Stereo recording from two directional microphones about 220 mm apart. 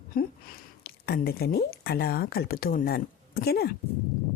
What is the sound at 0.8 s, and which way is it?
Speech, 45° left (ahead or behind).